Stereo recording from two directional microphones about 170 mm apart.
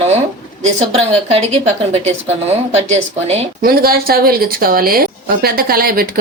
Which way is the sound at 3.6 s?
60° right (ahead or behind).